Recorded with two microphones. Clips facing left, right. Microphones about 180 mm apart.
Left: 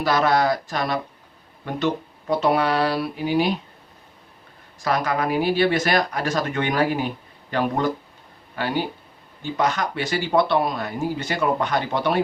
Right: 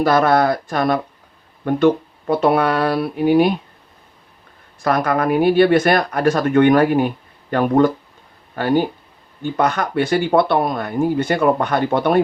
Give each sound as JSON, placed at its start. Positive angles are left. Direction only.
{"t": 0.0, "sound": "speech", "side_deg": -55}
{"t": 4.8, "sound": "speech", "side_deg": -55}